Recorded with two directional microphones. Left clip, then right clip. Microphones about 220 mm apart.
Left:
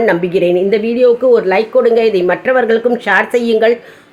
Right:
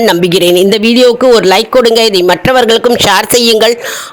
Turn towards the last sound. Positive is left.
turn(degrees=-50)  # may be behind; listen again after turning